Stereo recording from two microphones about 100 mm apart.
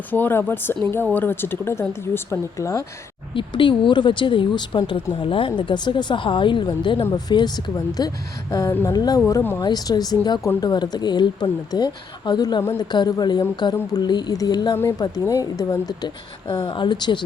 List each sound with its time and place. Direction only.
0.1 s speech: 20° left (ahead or behind)
3.3 s a woman's voice: 55° left (ahead or behind)